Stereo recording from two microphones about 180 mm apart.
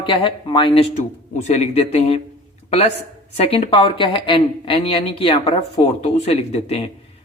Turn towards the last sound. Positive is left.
turn(degrees=35)  # may be behind; listen again after turning